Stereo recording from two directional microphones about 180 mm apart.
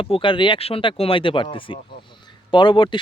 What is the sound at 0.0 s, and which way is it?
Speech, 30° left (ahead or behind).